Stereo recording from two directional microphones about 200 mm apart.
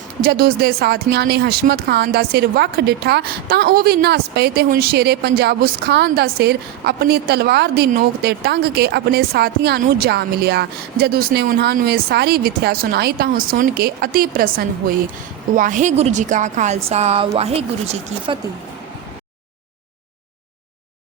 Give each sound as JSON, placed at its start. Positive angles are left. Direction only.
{"t": 0.2, "sound": "a woman's voice", "side_deg": -50}